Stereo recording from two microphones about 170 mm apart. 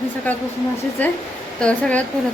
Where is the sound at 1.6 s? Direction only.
5° left (ahead or behind).